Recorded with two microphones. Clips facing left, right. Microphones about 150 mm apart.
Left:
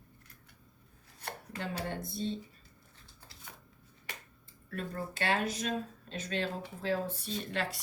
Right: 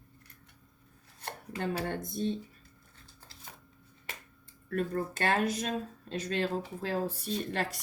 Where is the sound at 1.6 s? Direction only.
50° right (ahead or behind).